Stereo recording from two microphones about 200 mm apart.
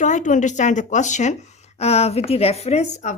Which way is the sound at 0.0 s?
40° left (ahead or behind).